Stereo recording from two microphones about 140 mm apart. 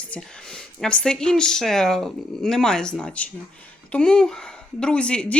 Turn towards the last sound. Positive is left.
turn(degrees=5)  # may be behind; listen again after turning